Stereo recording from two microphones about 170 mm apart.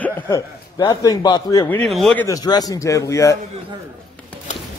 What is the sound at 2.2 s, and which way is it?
A man's voice, 20° left (ahead or behind).